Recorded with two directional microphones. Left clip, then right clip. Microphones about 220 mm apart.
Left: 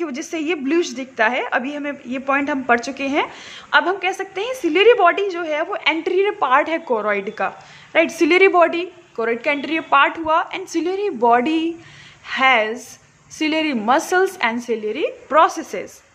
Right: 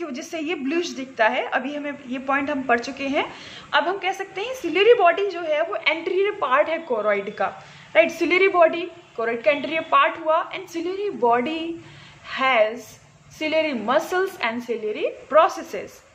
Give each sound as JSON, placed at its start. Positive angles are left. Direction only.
{"t": 0.0, "sound": "a woman's voice", "side_deg": 55}